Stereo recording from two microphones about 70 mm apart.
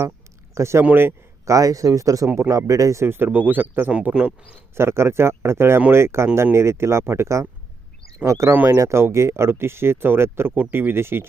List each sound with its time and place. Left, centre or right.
0.5 s speech: right
1.5 s speech: right
3.9 s speech: centre
4.7 s speech: right
8.5 s speech: right